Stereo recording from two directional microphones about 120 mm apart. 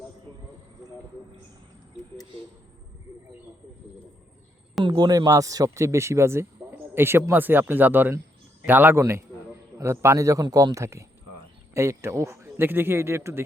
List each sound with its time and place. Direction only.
4.8 s speech: 40° right (ahead or behind); by 13.4 s 20° right (ahead or behind)